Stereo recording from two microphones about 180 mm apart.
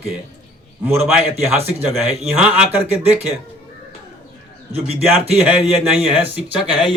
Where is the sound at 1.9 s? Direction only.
5° right (ahead or behind).